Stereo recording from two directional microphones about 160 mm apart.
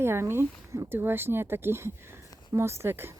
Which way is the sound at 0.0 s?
15° right (ahead or behind).